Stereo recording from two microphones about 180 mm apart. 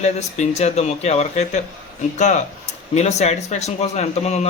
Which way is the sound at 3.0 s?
40° left (ahead or behind).